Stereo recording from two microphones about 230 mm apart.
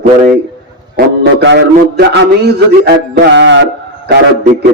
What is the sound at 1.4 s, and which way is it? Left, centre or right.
A man's voice, right.